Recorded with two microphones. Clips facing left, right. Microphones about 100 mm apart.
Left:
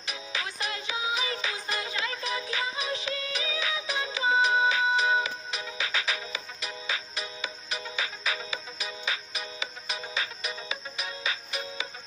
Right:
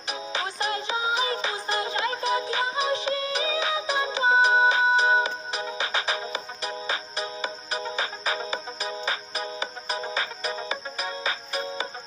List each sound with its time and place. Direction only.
0.1 s music: 35° right (ahead or behind)